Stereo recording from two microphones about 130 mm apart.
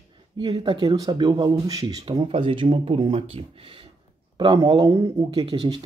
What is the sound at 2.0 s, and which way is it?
Speech, 45° right (ahead or behind).